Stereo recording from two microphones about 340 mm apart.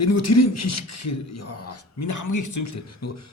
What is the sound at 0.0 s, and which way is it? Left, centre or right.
Speech, left.